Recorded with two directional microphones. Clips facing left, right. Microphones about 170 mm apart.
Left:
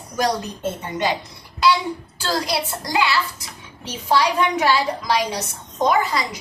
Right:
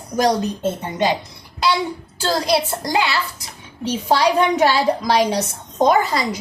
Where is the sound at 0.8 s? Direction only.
25° right (ahead or behind).